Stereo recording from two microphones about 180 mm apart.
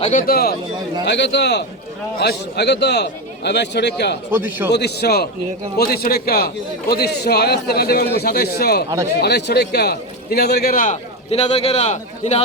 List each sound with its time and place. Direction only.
0.0 s a man's voice: 45° left (ahead or behind)
1.0 s a man's voice: 75° left (ahead or behind)
4.3 s a man's voice: 10° right (ahead or behind)
4.7 s a man's voice: 65° left (ahead or behind); by 12.4 s 40° left (ahead or behind)